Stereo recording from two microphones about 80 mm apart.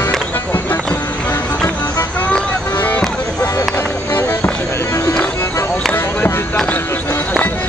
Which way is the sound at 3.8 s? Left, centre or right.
Left.